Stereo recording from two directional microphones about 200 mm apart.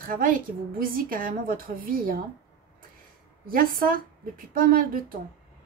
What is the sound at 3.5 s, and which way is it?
A woman's voice, 45° right (ahead or behind).